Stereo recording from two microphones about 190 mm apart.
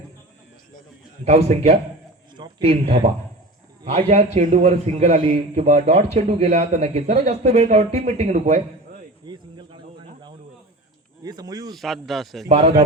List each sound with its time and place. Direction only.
1.5 s a man's voice: 35° right (ahead or behind)
2.3 s a man's voice: 25° right (ahead or behind)
9.2 s a sound: 25° right (ahead or behind)
11.2 s speech: 20° right (ahead or behind)
11.7 s speech: centre (ahead or behind)
12.5 s a man's voice: 30° right (ahead or behind)